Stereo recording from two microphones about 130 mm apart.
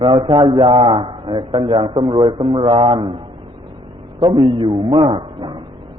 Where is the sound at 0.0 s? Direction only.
40° right (ahead or behind).